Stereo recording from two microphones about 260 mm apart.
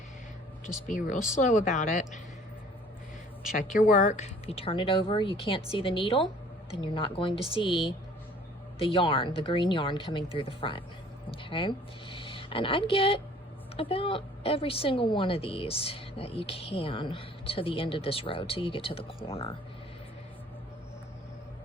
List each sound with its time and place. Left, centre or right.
0.9 s speech: left
3.5 s a woman's voice: left